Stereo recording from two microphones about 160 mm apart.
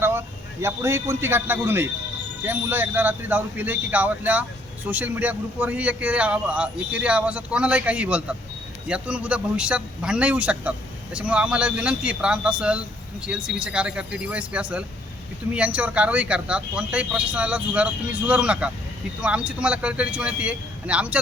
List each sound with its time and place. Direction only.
0.0 s a man's voice: 15° right (ahead or behind)